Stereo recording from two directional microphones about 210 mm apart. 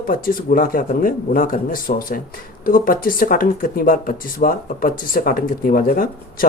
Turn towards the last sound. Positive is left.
turn(degrees=40)  # may be behind; listen again after turning